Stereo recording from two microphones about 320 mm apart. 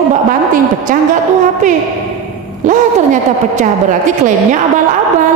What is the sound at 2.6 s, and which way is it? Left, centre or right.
A woman's voice, right.